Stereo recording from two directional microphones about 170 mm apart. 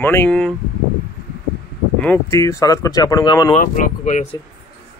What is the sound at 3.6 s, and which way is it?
Speech, 50° left (ahead or behind).